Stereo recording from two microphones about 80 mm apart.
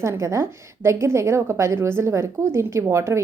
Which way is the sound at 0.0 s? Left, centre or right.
Right.